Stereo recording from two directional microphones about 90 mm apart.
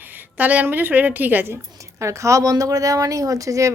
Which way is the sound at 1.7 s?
35° right (ahead or behind).